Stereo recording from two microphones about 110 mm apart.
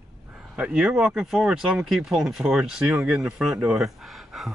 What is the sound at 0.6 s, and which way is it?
Speech, 10° right (ahead or behind).